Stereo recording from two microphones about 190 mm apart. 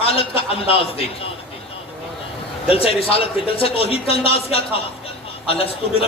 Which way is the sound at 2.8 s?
30° left (ahead or behind).